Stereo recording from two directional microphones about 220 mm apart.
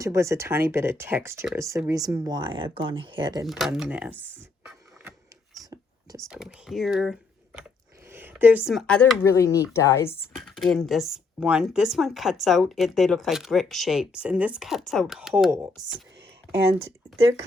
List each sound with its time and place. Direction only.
0.0 s speech: 15° right (ahead or behind)
3.4 s speech: centre (ahead or behind)
5.7 s whispering: 15° right (ahead or behind)
6.2 s speech: centre (ahead or behind)
15.5 s speech: 10° right (ahead or behind)